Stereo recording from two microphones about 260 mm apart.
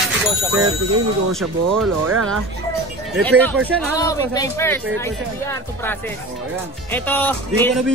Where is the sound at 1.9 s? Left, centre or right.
Right.